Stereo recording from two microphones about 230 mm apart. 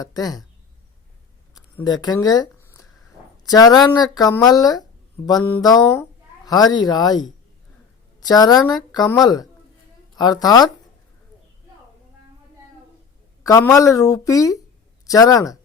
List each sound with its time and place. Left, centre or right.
0.0 s a woman's voice: centre
1.5 s a sound: centre
3.4 s a woman's voice: centre
13.4 s a man's voice: centre